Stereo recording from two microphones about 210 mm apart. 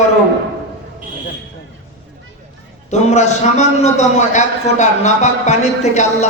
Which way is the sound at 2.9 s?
35° left (ahead or behind).